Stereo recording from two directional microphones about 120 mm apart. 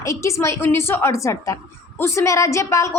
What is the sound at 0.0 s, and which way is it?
A woman's voice, 25° left (ahead or behind).